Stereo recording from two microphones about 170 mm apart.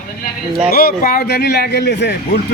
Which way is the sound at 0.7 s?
60° left (ahead or behind).